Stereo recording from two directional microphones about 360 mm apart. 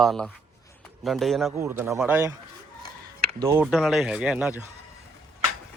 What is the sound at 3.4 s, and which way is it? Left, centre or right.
A man's voice, centre.